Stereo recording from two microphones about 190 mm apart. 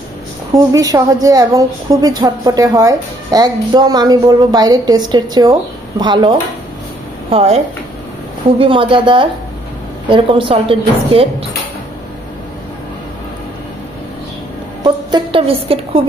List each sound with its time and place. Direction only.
0.7 s a woman's voice: 20° right (ahead or behind)
14.8 s a woman's voice: 25° right (ahead or behind)